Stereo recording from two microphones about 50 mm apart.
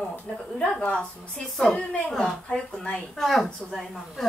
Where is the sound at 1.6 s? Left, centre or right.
Centre.